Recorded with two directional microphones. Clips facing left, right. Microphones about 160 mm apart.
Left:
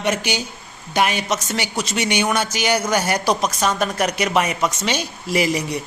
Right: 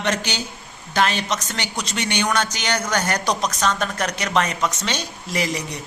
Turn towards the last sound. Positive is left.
turn(degrees=10)  # may be behind; listen again after turning